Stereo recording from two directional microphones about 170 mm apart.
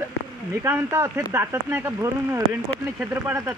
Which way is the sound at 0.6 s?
15° right (ahead or behind).